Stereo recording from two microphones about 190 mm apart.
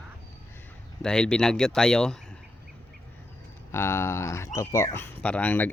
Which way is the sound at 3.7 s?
15° left (ahead or behind).